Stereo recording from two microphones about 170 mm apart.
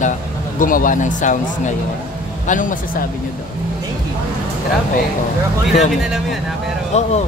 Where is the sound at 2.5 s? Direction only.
50° left (ahead or behind).